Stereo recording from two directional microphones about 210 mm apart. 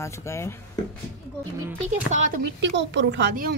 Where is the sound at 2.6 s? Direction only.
55° right (ahead or behind).